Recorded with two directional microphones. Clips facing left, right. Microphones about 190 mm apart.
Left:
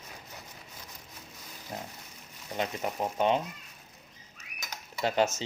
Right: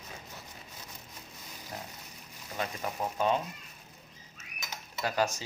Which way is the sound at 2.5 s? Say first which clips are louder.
Left 3 dB; 25° left (ahead or behind).